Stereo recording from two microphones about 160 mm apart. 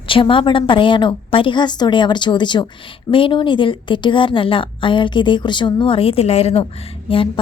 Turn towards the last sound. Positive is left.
turn(degrees=35)  # may be behind; listen again after turning